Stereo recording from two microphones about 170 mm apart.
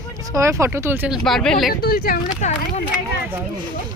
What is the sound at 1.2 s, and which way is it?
Speech, 5° left (ahead or behind).